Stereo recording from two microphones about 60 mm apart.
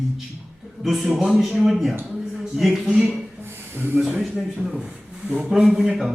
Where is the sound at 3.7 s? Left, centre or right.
Right.